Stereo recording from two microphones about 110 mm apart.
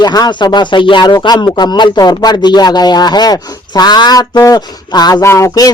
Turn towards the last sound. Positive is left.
turn(degrees=30)  # may be behind; listen again after turning